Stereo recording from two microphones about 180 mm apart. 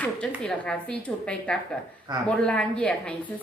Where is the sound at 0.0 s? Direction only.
5° left (ahead or behind).